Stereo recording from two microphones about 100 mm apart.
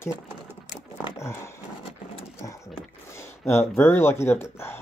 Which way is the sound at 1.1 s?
25° left (ahead or behind).